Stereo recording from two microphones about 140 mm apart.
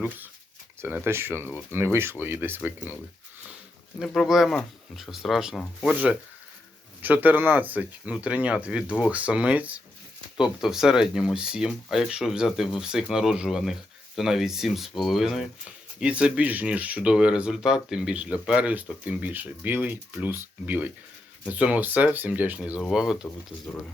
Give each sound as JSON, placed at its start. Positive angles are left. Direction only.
{"t": 0.8, "sound": "speech", "side_deg": -15}
{"t": 4.0, "sound": "speech", "side_deg": 0}